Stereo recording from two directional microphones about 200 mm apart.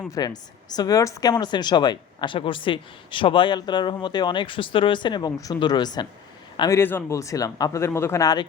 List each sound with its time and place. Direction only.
0.1 s speech: 20° left (ahead or behind)